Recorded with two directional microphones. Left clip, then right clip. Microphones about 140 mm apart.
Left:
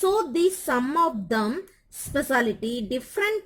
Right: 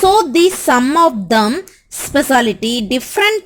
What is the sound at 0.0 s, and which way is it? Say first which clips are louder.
A woman's voice: right 12 dB; 25° right (ahead or behind).